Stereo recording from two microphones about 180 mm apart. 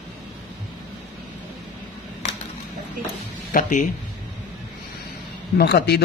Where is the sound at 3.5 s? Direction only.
45° left (ahead or behind).